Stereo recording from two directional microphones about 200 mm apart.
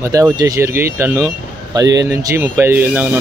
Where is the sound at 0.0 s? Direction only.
15° right (ahead or behind).